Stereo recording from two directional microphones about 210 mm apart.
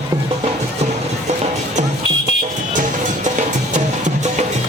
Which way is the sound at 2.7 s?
35° right (ahead or behind).